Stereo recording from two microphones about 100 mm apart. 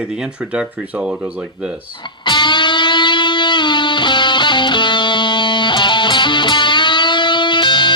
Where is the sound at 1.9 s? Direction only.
50° left (ahead or behind).